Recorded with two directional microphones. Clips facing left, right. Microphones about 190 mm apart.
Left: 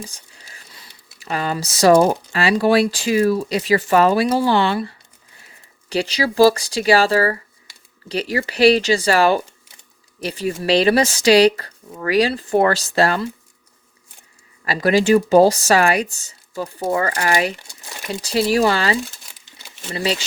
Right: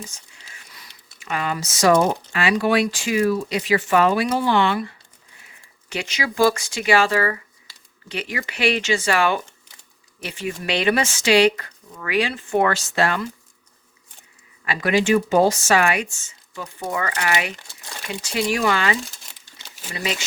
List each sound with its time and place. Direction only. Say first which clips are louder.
0.0 s whispering: left 3 dB; 35° left (ahead or behind)
1.2 s speech: left 3 dB; 35° left (ahead or behind)
14.6 s speech: left 4 dB; 35° left (ahead or behind)
20.0 s speech: left 5 dB; 30° left (ahead or behind)